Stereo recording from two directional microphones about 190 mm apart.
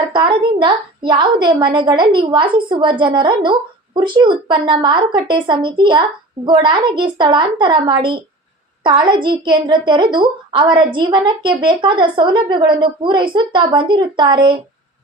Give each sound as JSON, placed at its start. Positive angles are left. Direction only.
{"t": 0.1, "sound": "a woman's voice", "side_deg": -25}